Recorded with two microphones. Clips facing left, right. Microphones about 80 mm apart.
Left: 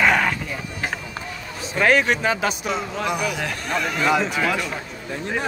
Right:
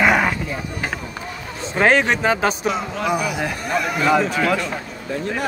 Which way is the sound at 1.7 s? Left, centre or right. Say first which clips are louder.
Right 2 dB; right.